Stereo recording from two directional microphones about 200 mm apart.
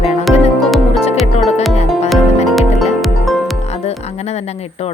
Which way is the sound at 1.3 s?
35° left (ahead or behind).